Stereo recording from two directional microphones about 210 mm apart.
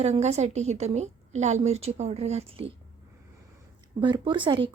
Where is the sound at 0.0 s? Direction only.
30° right (ahead or behind).